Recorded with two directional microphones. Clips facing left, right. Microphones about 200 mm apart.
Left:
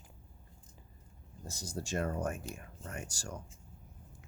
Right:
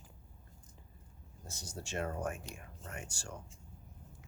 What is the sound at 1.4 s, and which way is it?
Speech, 40° left (ahead or behind).